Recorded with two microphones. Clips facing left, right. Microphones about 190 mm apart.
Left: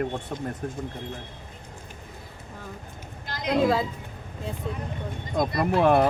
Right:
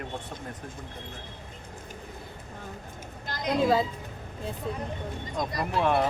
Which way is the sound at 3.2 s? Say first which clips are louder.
Even; 45° right (ahead or behind).